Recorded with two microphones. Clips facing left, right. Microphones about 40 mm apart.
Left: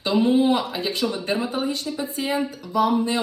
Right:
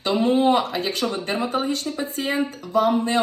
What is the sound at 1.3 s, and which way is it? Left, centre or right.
Speech, right.